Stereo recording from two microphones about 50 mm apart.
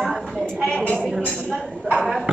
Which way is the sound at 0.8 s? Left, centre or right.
Centre.